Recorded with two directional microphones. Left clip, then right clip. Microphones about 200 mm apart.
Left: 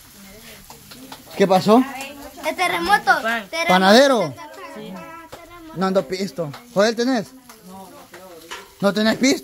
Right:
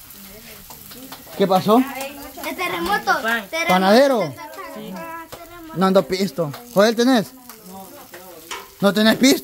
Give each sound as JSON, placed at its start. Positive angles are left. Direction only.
{"t": 1.4, "sound": "speech", "side_deg": 20}
{"t": 2.5, "sound": "a woman's voice", "side_deg": 35}
{"t": 3.3, "sound": "speech", "side_deg": 0}
{"t": 3.7, "sound": "speech", "side_deg": 10}
{"t": 5.8, "sound": "speech", "side_deg": -20}
{"t": 8.8, "sound": "speech", "side_deg": -10}